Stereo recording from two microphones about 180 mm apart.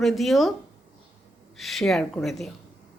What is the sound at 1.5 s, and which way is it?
Speech, centre (ahead or behind).